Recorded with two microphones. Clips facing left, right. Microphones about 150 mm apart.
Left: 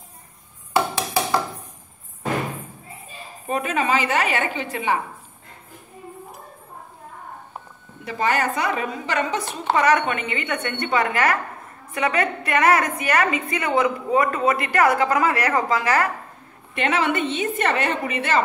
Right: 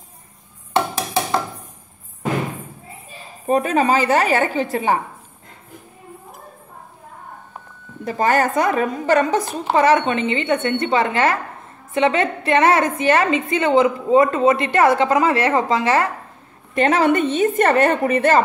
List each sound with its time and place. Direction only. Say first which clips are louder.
0.7 s a sound: right 2 dB; 5° left (ahead or behind)
3.4 s a woman's voice: right 6 dB; 40° right (ahead or behind)
8.0 s a woman's voice: right 5 dB; 45° right (ahead or behind)
9.8 s a woman's voice: right 4 dB; 25° right (ahead or behind)
16.7 s a woman's voice: right 6 dB; 40° right (ahead or behind)